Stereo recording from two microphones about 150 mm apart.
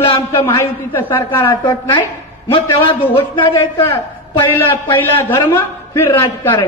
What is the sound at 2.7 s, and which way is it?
Speech, 15° left (ahead or behind).